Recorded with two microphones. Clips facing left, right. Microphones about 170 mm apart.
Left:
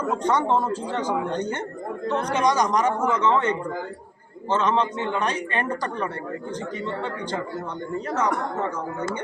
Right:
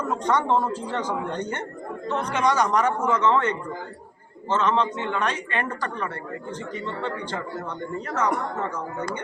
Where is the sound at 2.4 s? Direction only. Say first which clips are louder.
Right 1 dB; 10° left (ahead or behind).